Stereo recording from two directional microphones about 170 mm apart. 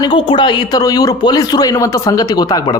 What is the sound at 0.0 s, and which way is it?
Speech, 30° left (ahead or behind).